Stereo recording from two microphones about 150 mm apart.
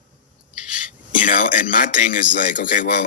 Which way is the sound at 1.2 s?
60° left (ahead or behind).